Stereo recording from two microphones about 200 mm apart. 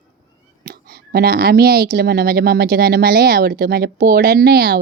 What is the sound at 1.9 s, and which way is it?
Speech, 50° right (ahead or behind).